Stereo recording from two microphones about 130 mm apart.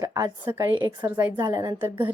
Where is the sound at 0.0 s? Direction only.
25° right (ahead or behind).